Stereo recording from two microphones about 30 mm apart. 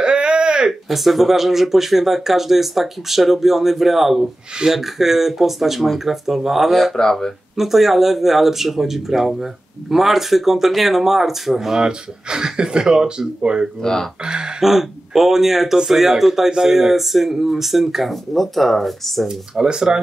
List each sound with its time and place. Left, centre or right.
0.0 s a sound: right
0.8 s speech: centre
7.0 s speech: centre
7.5 s speech: centre
12.3 s speech: right
14.6 s speech: centre
18.3 s speech: centre
19.6 s speech: right